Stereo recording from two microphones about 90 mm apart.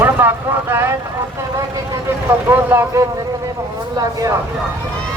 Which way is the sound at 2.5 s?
25° right (ahead or behind).